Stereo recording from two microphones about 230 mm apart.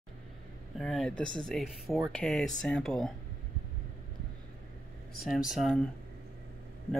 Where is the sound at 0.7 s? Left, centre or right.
Centre.